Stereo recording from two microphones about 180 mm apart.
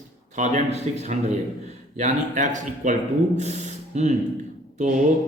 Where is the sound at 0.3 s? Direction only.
40° right (ahead or behind).